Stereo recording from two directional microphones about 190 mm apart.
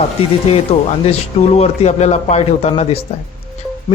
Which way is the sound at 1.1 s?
35° left (ahead or behind).